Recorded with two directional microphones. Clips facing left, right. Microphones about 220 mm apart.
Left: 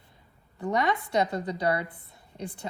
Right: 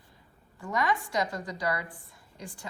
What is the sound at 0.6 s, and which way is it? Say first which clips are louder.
A woman's voice: left 3 dB; 25° left (ahead or behind).